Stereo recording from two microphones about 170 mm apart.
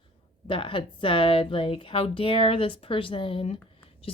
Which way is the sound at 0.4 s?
30° left (ahead or behind).